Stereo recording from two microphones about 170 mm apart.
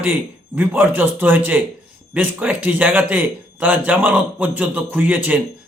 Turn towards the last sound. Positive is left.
turn(degrees=-10)  # may be behind; listen again after turning